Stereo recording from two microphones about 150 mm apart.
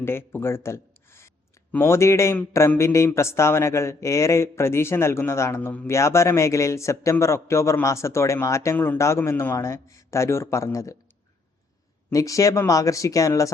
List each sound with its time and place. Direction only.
0.0 s a man's voice: 15° left (ahead or behind)
12.1 s a man's voice: 20° left (ahead or behind)